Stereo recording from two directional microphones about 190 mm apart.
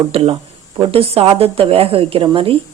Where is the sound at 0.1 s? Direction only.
30° right (ahead or behind).